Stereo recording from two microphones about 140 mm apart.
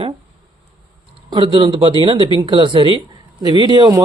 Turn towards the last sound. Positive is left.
turn(degrees=-30)  # may be behind; listen again after turning